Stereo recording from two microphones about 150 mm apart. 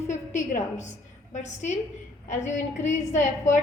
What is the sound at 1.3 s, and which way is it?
A woman's voice, 50° left (ahead or behind).